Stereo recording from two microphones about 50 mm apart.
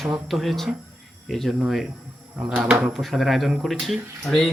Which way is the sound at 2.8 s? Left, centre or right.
Centre.